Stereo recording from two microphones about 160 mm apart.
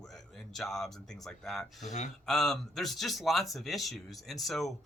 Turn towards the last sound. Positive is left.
turn(degrees=0)  # may be behind; listen again after turning